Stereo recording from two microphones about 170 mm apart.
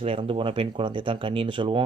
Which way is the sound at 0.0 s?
30° right (ahead or behind).